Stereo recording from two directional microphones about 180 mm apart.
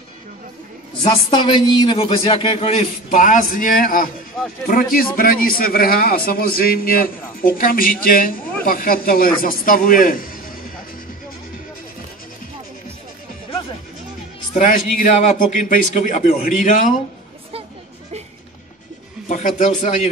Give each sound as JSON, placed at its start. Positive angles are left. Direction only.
{"t": 1.0, "sound": "a man's voice", "side_deg": 25}
{"t": 3.1, "sound": "a man's voice", "side_deg": 50}
{"t": 14.5, "sound": "a man's voice", "side_deg": 45}
{"t": 19.2, "sound": "speech", "side_deg": 45}